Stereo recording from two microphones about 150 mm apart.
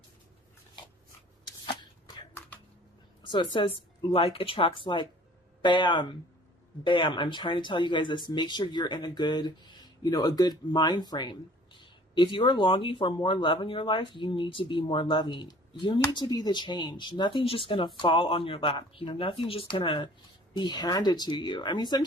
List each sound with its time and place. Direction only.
3.2 s a woman's voice: 30° left (ahead or behind)